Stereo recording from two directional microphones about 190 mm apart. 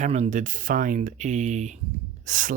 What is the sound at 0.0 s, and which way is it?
Speech, 40° right (ahead or behind).